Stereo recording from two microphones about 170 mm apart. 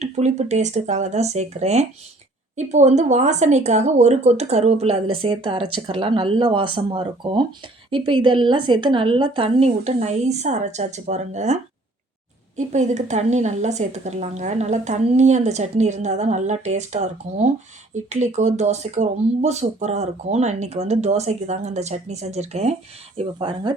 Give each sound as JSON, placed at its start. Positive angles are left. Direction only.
{"t": 0.0, "sound": "a woman's voice", "side_deg": -45}
{"t": 23.1, "sound": "speech", "side_deg": -30}